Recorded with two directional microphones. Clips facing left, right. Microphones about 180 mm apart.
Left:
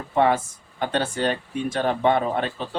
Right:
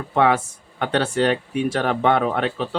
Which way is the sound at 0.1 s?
75° right (ahead or behind).